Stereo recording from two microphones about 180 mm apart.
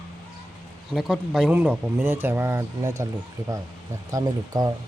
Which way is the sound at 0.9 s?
Centre (ahead or behind).